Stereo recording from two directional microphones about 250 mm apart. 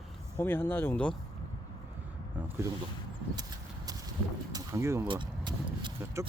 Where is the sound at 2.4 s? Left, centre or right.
Centre.